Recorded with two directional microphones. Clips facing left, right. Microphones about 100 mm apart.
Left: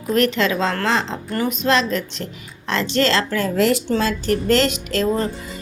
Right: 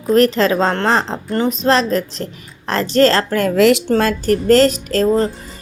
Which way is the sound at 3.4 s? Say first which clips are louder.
Right 8 dB; 90° right.